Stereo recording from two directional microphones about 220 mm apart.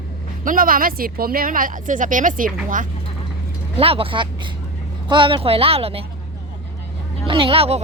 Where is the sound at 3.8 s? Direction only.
25° right (ahead or behind).